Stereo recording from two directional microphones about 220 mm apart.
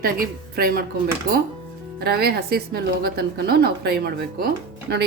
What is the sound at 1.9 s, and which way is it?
A woman's voice, 45° right (ahead or behind).